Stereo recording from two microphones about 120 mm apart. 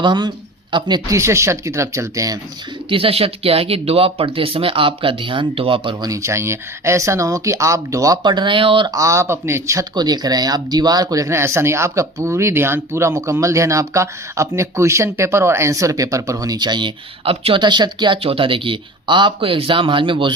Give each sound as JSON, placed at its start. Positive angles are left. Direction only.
{"t": 0.0, "sound": "speech", "side_deg": -40}
{"t": 1.1, "sound": "speech", "side_deg": -25}
{"t": 2.9, "sound": "speech", "side_deg": -50}
{"t": 6.1, "sound": "speech", "side_deg": -25}
{"t": 8.9, "sound": "speech", "side_deg": -25}